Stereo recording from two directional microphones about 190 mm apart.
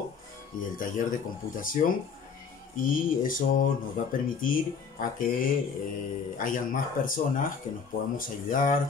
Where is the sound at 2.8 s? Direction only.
45° left (ahead or behind).